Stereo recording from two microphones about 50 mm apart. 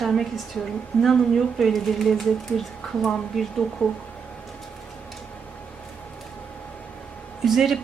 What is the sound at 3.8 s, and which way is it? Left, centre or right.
Speech, centre.